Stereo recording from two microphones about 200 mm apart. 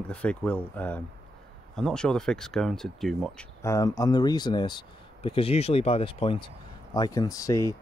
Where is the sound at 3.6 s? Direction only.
15° left (ahead or behind).